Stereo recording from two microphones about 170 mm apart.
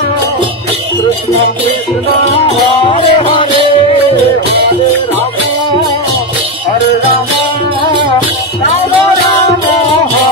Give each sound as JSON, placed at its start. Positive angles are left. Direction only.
{"t": 2.3, "sound": "music", "side_deg": 30}